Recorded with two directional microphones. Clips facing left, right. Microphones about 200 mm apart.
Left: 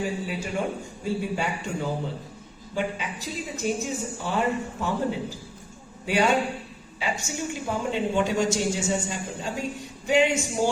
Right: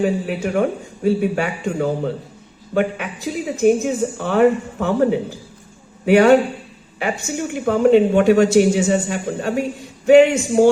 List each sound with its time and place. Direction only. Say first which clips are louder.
0.0 s a woman's voice: right 9 dB; 65° right (ahead or behind)